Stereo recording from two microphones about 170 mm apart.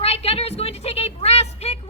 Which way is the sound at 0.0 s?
35° left (ahead or behind).